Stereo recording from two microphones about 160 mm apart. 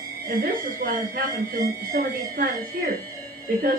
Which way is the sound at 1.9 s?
65° right (ahead or behind).